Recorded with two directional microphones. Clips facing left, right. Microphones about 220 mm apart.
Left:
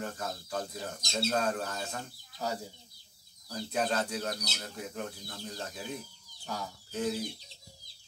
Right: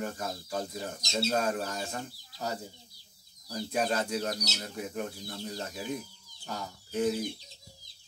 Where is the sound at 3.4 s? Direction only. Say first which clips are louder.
Right 2 dB; 15° right (ahead or behind).